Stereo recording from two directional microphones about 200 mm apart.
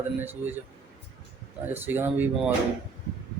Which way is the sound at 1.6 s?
10° right (ahead or behind).